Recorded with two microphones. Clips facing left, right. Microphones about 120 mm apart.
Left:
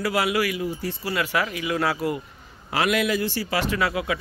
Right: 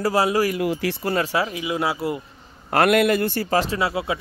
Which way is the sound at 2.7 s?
55° right (ahead or behind).